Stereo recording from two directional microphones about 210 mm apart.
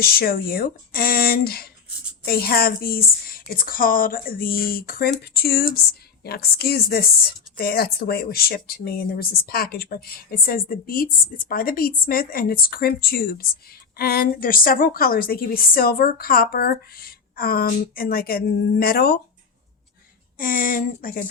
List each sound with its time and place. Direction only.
0.0 s speech: 45° left (ahead or behind)
20.4 s speech: 40° left (ahead or behind)